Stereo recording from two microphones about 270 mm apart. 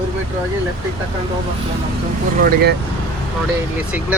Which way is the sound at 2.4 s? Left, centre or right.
Right.